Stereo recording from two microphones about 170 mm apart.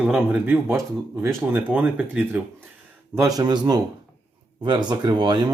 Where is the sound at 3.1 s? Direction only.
20° right (ahead or behind).